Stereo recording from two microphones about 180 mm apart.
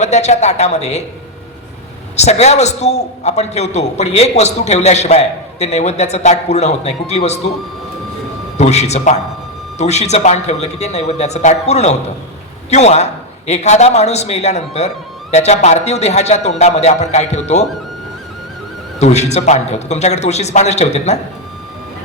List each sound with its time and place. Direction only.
0.0 s a man's voice: 40° left (ahead or behind)
2.1 s a man's voice: 40° left (ahead or behind)
8.5 s a man's voice: 40° left (ahead or behind)
18.9 s a man's voice: 40° left (ahead or behind)